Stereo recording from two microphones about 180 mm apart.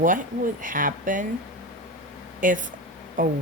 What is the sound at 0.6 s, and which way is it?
Speech, 50° right (ahead or behind).